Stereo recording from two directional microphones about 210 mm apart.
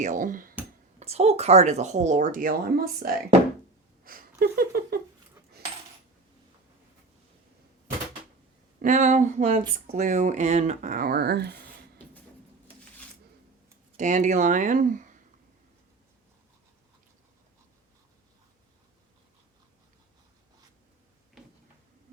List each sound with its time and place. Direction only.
0.0 s a woman's voice: 40° right (ahead or behind)
8.8 s a woman's voice: 35° right (ahead or behind); by 11.6 s 50° right (ahead or behind)
13.9 s a woman's voice: 35° right (ahead or behind)